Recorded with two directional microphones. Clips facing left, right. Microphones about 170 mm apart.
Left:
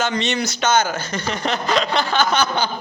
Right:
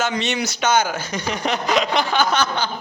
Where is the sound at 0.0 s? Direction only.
10° right (ahead or behind).